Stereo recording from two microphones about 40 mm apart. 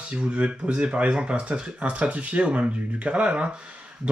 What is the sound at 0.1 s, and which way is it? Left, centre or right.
Speech, right.